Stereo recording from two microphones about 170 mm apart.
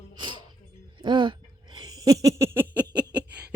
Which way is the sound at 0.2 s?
25° right (ahead or behind).